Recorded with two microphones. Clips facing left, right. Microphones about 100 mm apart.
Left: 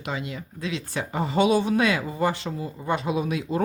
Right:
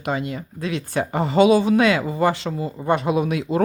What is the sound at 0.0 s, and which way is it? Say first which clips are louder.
Speech: right 6 dB; 50° right (ahead or behind).